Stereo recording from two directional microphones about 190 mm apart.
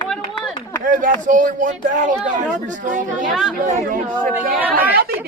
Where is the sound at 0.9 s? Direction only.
45° right (ahead or behind).